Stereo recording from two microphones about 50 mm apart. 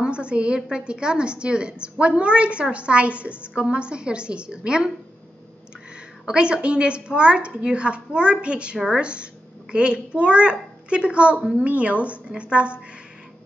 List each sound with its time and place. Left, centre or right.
0.0 s a woman's voice: right
6.2 s a woman's voice: centre